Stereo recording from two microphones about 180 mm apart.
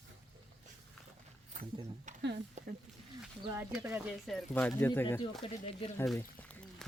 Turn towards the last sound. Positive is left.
turn(degrees=10)  # may be behind; listen again after turning